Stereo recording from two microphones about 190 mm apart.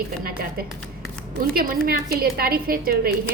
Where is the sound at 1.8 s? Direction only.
50° right (ahead or behind).